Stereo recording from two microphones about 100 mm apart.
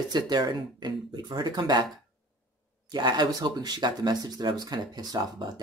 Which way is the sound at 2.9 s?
45° right (ahead or behind).